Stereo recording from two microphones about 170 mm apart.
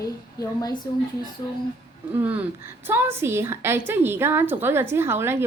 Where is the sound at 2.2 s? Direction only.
10° right (ahead or behind).